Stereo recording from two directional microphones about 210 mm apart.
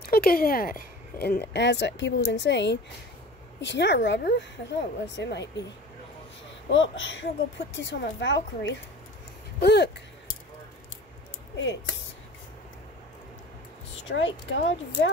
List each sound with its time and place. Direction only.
0.0 s speech: 45° left (ahead or behind)
6.7 s speech: 65° left (ahead or behind)
9.6 s a sound: 55° left (ahead or behind)
13.9 s speech: 60° left (ahead or behind)